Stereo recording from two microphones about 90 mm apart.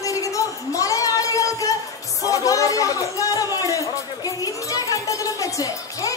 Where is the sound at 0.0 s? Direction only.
40° left (ahead or behind).